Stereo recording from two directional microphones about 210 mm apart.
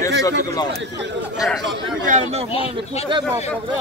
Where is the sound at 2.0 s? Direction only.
30° right (ahead or behind).